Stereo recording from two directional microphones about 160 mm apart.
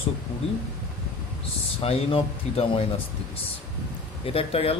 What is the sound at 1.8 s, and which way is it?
Speech, 35° left (ahead or behind).